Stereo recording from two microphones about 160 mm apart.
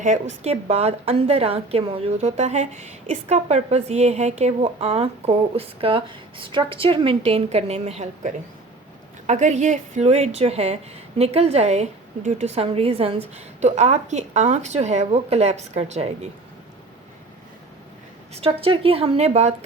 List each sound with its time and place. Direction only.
0.0 s a woman's voice: 50° right (ahead or behind)
18.3 s a woman's voice: 35° right (ahead or behind)